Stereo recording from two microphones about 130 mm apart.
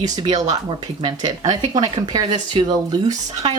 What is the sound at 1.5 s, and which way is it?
Speech, 30° right (ahead or behind).